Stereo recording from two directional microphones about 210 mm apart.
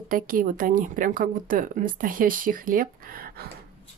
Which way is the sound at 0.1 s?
40° right (ahead or behind).